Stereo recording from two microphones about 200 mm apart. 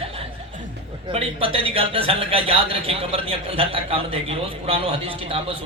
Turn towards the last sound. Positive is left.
turn(degrees=-30)  # may be behind; listen again after turning